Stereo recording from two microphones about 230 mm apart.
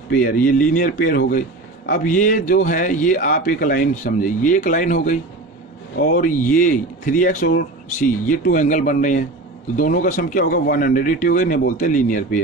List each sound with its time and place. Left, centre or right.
0.1 s a man's voice: left